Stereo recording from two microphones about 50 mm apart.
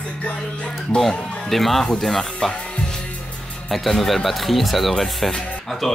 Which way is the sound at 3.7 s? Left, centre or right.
Centre.